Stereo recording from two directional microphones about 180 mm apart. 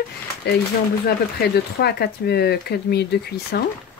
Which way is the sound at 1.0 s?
60° left (ahead or behind).